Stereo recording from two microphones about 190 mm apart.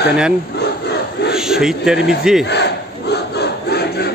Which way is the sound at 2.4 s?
60° left (ahead or behind).